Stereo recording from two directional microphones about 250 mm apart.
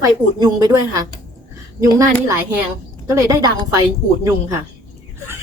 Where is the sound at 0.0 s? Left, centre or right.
Centre.